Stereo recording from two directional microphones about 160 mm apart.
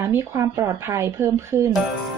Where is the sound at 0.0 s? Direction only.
15° right (ahead or behind).